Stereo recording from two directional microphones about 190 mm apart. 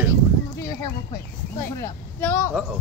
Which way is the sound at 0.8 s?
15° left (ahead or behind).